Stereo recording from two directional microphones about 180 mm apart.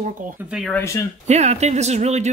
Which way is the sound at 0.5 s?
Centre (ahead or behind).